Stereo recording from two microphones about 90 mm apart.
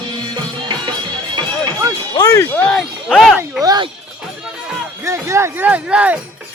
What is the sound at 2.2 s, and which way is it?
Speech, 40° left (ahead or behind).